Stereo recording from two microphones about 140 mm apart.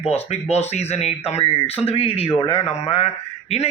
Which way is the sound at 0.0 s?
50° left (ahead or behind).